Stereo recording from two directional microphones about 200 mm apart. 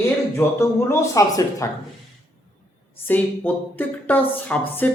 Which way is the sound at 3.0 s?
10° left (ahead or behind).